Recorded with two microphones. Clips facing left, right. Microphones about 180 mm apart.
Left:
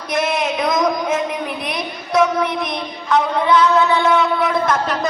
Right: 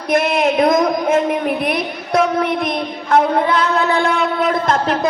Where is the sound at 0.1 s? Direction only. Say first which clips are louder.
Right 5 dB; 55° right (ahead or behind).